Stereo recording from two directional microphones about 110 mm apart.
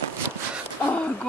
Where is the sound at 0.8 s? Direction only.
10° left (ahead or behind).